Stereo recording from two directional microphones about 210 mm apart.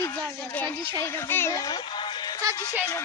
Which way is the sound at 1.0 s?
10° left (ahead or behind).